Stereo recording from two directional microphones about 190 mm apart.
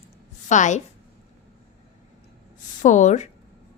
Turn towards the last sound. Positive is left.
turn(degrees=40)  # may be behind; listen again after turning